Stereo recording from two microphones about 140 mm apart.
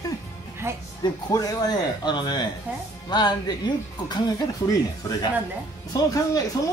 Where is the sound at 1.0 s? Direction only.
25° left (ahead or behind).